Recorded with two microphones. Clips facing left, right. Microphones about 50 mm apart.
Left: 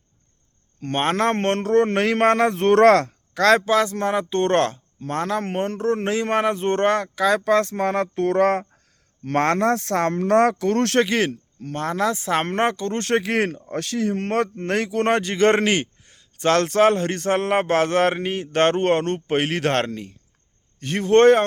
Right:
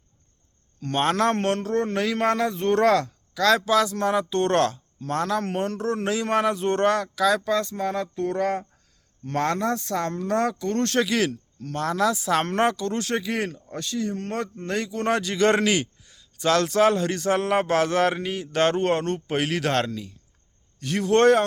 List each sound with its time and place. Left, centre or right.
0.8 s a man's voice: left
7.5 s speech: left
10.6 s speech: left
11.0 s a man's voice: left
13.1 s speech: left
15.1 s a man's voice: left